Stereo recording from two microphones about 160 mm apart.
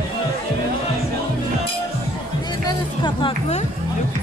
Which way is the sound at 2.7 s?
30° left (ahead or behind).